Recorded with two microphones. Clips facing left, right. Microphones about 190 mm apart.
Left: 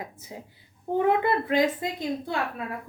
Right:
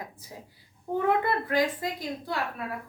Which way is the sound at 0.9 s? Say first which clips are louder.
Left 3 dB; 20° left (ahead or behind).